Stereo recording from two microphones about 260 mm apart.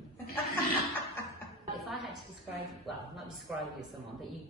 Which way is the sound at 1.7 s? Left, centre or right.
Centre.